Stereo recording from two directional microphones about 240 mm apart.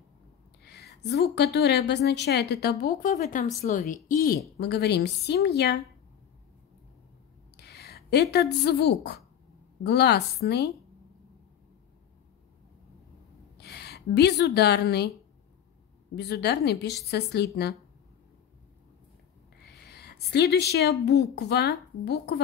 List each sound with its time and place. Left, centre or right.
0.7 s a woman's voice: left
7.5 s a woman's voice: left
13.6 s a woman's voice: left
16.2 s a woman's voice: left
19.6 s speech: left